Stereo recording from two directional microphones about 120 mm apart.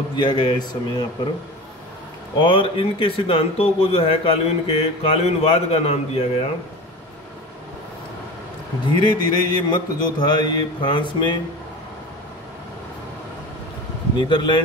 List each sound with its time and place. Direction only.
0.1 s a man's voice: 40° left (ahead or behind)
2.3 s speech: 45° left (ahead or behind)
8.9 s a man's voice: 40° left (ahead or behind)
14.1 s speech: 45° left (ahead or behind)